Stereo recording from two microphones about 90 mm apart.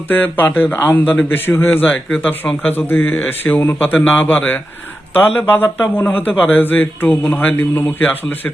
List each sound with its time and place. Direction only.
0.1 s a man's voice: 20° left (ahead or behind)